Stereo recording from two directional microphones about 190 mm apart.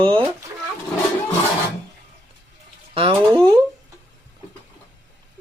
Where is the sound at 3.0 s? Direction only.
30° right (ahead or behind).